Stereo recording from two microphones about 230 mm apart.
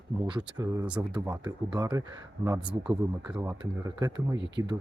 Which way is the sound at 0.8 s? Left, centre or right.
Centre.